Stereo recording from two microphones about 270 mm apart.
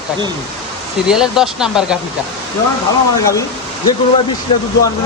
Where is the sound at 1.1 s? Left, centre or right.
Centre.